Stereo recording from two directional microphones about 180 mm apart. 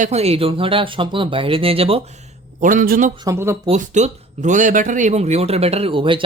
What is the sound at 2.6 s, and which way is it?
Speech, 50° right (ahead or behind).